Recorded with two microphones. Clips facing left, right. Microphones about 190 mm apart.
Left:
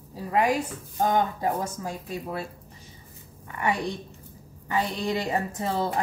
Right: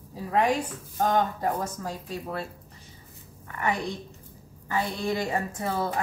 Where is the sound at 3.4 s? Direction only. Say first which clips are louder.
Left 1 dB; 15° left (ahead or behind).